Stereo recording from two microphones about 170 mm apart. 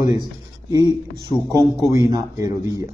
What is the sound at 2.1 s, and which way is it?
Speech, 20° right (ahead or behind).